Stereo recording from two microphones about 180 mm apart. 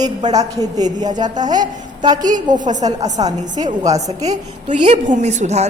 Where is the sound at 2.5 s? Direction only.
45° right (ahead or behind).